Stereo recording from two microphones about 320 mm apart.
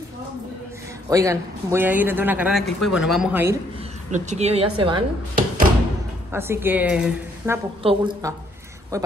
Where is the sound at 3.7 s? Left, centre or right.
Right.